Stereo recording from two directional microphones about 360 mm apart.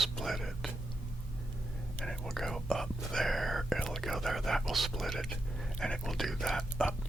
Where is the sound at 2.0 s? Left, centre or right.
Centre.